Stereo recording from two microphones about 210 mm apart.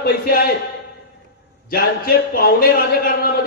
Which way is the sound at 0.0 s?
45° left (ahead or behind).